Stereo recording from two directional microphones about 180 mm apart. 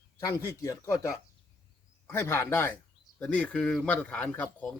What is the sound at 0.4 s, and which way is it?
A man's voice, 15° left (ahead or behind).